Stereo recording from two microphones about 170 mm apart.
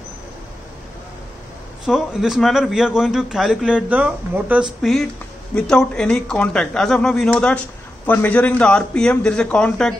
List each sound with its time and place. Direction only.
1.9 s a man's voice: centre (ahead or behind)
5.5 s a man's voice: 5° left (ahead or behind)